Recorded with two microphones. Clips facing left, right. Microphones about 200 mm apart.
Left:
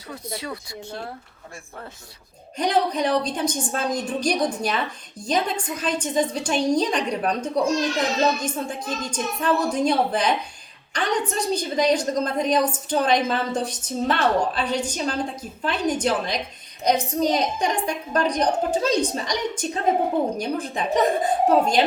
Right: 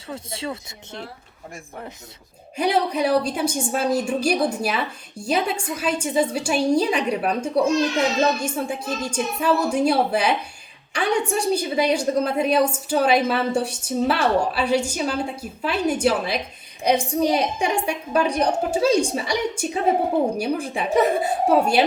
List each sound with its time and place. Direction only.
0.1 s speech: 25° right (ahead or behind)
2.6 s a woman's voice: 10° right (ahead or behind)